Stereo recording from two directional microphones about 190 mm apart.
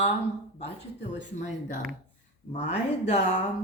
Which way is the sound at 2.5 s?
35° left (ahead or behind).